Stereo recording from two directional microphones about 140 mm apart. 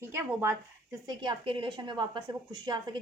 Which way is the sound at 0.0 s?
20° right (ahead or behind).